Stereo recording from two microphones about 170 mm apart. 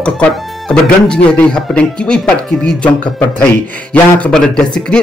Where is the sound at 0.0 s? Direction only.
5° left (ahead or behind).